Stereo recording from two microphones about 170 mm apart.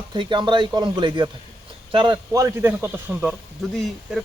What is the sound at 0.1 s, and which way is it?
A man's voice, 30° right (ahead or behind).